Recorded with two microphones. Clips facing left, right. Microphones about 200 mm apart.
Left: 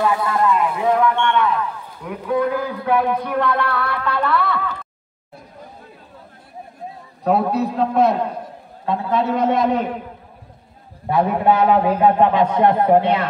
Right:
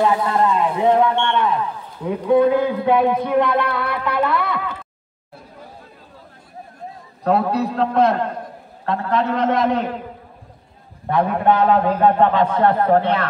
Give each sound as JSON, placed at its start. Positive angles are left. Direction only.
{"t": 0.0, "sound": "speech", "side_deg": -25}
{"t": 7.2, "sound": "a man's voice", "side_deg": 0}
{"t": 11.1, "sound": "a man's voice", "side_deg": 5}